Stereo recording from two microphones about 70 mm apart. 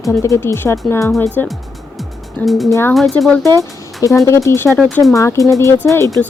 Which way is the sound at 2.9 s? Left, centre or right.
Centre.